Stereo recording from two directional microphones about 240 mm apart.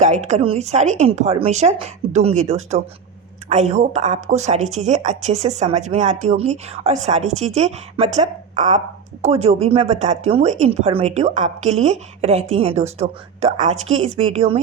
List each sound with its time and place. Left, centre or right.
0.3 s speech: right